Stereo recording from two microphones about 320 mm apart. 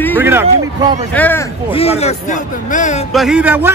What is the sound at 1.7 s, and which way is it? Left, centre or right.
Speech, centre.